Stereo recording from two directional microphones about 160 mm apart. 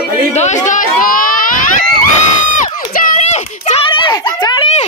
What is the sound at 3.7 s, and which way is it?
Speech, 35° left (ahead or behind).